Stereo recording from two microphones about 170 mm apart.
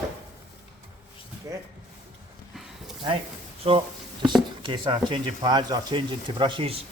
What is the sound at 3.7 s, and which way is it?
Speech, 30° right (ahead or behind).